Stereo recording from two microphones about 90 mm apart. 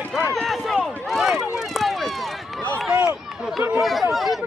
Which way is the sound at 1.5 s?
Centre (ahead or behind).